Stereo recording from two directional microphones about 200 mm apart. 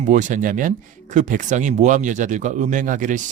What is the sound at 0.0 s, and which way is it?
Speech, 40° right (ahead or behind).